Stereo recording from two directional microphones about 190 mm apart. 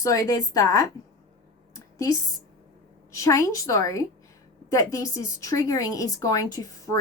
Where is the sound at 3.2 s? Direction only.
15° left (ahead or behind).